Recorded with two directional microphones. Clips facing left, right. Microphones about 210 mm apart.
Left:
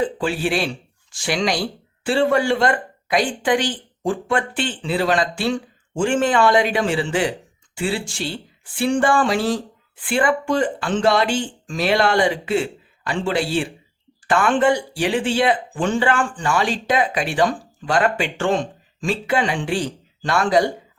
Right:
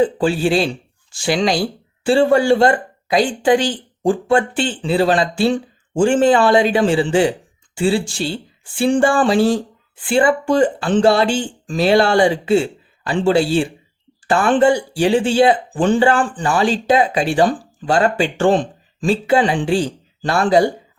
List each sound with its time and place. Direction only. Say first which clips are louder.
0.0 s speech: right 6 dB; 30° right (ahead or behind)